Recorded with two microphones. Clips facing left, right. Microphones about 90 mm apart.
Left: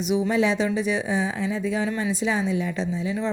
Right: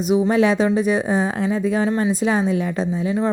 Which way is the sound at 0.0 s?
45° right (ahead or behind).